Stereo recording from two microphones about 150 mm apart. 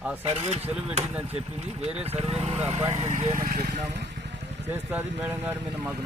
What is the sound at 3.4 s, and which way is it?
Vehicle, 70° right (ahead or behind).